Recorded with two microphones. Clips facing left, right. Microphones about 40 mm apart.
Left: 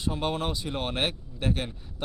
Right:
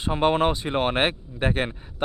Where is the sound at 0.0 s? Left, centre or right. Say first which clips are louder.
Right 8 dB; right.